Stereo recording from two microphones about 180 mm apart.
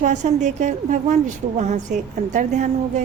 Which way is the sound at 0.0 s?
40° right (ahead or behind).